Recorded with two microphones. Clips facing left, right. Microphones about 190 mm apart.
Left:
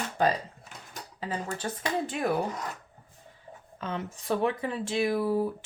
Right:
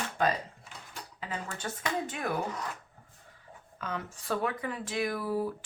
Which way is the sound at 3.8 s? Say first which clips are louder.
Left 3 dB; 25° left (ahead or behind).